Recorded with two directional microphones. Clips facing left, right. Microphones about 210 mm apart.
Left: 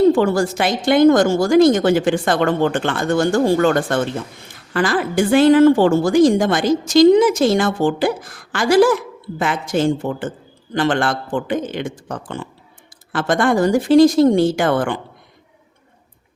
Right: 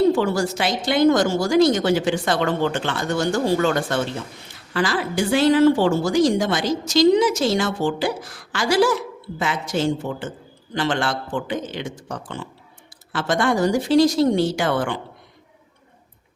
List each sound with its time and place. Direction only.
0.1 s a woman's voice: 50° left (ahead or behind)